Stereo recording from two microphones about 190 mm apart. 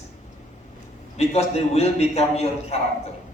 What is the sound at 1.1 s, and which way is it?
A man's voice, 35° left (ahead or behind).